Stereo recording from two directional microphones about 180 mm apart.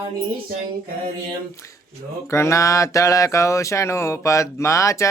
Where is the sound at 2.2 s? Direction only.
15° left (ahead or behind).